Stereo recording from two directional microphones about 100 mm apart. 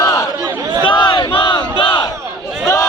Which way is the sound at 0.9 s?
50° left (ahead or behind).